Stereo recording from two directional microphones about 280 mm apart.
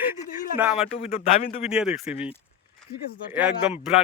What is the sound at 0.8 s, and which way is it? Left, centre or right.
Speech, left.